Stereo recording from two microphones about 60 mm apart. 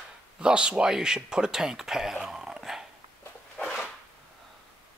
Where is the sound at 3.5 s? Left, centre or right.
Centre.